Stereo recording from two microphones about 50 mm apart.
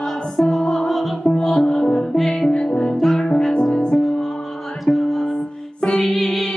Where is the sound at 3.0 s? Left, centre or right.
Centre.